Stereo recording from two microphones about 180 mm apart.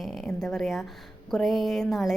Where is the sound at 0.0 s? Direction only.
Centre (ahead or behind).